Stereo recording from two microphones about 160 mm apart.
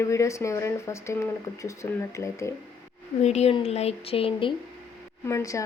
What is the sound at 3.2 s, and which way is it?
Speech, 40° left (ahead or behind).